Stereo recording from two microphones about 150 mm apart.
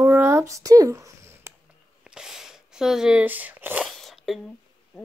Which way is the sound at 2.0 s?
5° right (ahead or behind).